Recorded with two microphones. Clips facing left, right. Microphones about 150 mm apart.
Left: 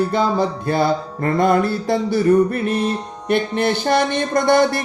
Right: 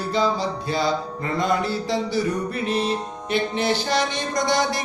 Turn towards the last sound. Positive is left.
turn(degrees=55)  # may be behind; listen again after turning